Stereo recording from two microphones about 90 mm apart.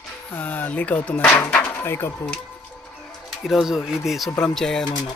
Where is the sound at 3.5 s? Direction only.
5° right (ahead or behind).